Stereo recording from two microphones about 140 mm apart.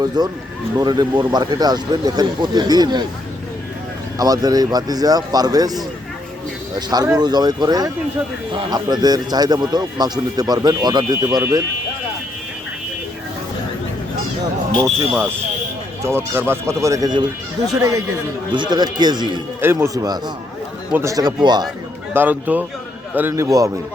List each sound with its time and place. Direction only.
0.2 s speech: 30° right (ahead or behind)
4.2 s speech: 25° right (ahead or behind)
16.0 s a man's voice: 15° right (ahead or behind)
19.6 s a man's voice: 15° right (ahead or behind)
22.1 s speech: 15° right (ahead or behind)